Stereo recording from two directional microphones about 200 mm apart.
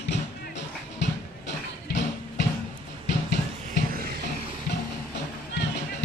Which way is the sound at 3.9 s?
50° right (ahead or behind).